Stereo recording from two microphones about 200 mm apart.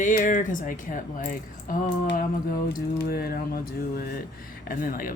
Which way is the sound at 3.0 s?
50° left (ahead or behind).